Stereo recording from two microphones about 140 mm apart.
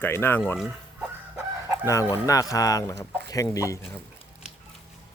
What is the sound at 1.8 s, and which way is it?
Speech, 20° left (ahead or behind).